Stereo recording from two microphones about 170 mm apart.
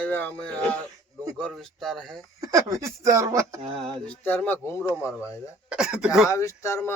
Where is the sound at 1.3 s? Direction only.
5° left (ahead or behind).